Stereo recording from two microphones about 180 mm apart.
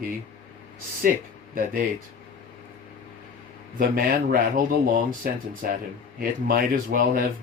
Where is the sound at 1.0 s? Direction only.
50° right (ahead or behind).